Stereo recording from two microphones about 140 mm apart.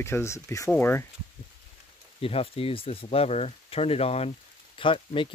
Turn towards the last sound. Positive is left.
turn(degrees=40)  # may be behind; listen again after turning